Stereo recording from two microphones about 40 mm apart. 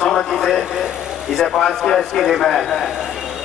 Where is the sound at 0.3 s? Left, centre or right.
Centre.